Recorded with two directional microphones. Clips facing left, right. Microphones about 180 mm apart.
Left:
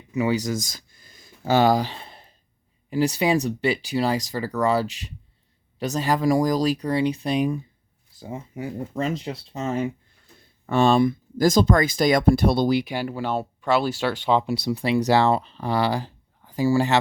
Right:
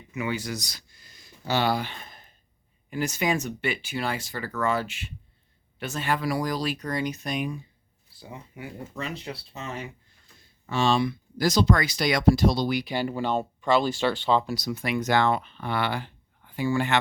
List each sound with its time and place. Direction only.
0.1 s speech: 35° left (ahead or behind)
8.1 s speech: 45° left (ahead or behind)
10.7 s speech: 55° left (ahead or behind)
12.8 s speech: 10° left (ahead or behind); by 17.0 s 35° left (ahead or behind)